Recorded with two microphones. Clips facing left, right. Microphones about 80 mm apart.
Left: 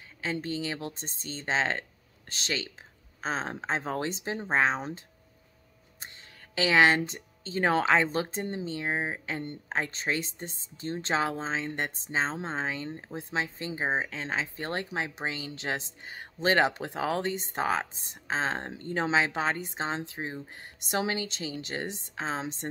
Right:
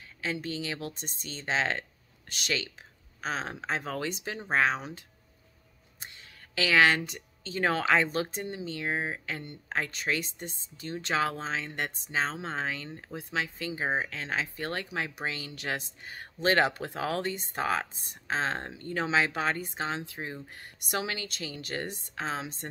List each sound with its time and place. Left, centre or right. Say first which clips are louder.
0.2 s speech: left 2 dB; left